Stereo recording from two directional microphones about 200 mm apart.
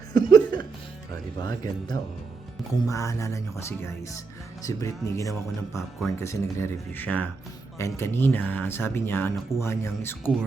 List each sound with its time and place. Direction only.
0.1 s music: 20° left (ahead or behind)
1.4 s speech: 20° left (ahead or behind)